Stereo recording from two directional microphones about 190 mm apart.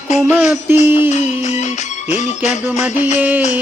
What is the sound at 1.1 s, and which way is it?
Music, 35° left (ahead or behind).